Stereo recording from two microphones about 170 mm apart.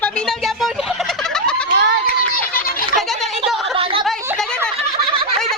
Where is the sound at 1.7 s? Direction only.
90° right.